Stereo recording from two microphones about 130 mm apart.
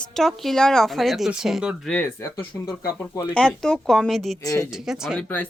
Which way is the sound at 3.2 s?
10° left (ahead or behind).